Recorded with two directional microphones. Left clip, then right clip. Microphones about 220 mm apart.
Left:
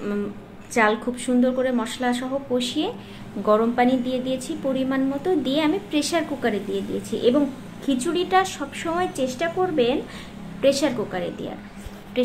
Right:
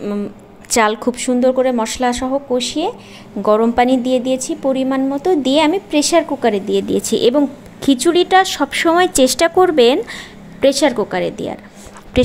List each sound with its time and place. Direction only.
0.7 s a woman's voice: 40° right (ahead or behind)